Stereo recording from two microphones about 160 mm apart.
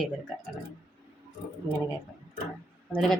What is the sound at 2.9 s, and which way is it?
Speech, 5° left (ahead or behind).